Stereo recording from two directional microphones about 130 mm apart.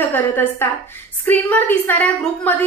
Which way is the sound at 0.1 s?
15° left (ahead or behind).